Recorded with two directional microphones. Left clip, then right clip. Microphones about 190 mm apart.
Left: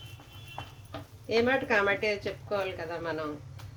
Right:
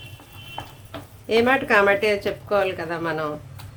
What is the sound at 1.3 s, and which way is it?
A woman's voice, 20° right (ahead or behind).